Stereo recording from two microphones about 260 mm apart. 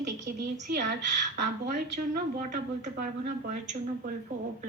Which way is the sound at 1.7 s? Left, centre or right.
Right.